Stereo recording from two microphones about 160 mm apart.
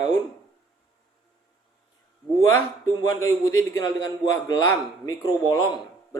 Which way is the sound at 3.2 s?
20° left (ahead or behind).